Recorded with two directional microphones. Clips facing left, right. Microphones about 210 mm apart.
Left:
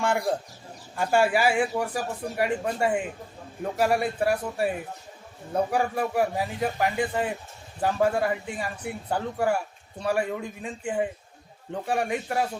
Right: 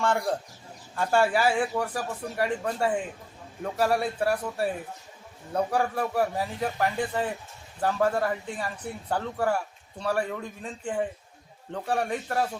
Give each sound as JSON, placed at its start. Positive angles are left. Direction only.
{"t": 0.0, "sound": "speech", "side_deg": 10}
{"t": 4.2, "sound": "speech", "side_deg": 0}
{"t": 5.5, "sound": "speech", "side_deg": 10}